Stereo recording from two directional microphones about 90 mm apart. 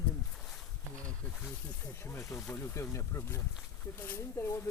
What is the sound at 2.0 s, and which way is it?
Speech, 30° left (ahead or behind).